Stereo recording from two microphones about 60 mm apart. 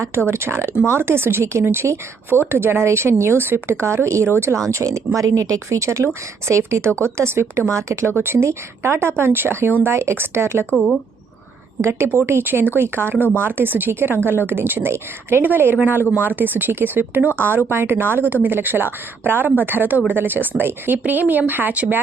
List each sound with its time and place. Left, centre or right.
0.3 s speech: right
8.2 s a woman's voice: right
11.8 s a woman's voice: right